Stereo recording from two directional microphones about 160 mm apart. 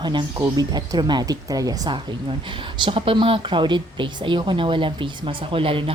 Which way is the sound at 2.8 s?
35° right (ahead or behind).